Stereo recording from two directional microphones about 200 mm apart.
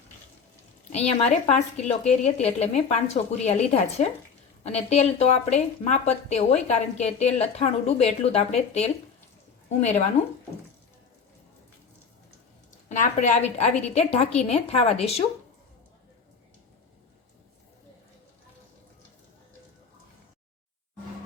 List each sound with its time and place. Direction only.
0.9 s speech: 35° left (ahead or behind)
12.9 s speech: 40° left (ahead or behind)